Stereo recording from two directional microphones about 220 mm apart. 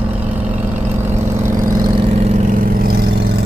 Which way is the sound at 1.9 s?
30° right (ahead or behind).